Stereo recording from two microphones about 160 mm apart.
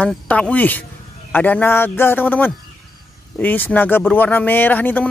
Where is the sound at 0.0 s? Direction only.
10° left (ahead or behind).